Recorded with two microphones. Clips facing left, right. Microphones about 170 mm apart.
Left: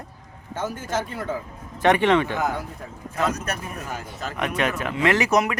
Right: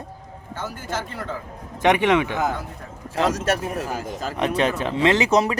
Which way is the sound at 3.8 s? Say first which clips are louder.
Right 4 dB; 35° right (ahead or behind).